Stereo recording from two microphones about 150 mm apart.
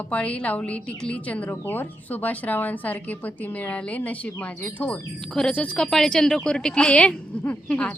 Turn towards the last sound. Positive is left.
turn(degrees=5)  # may be behind; listen again after turning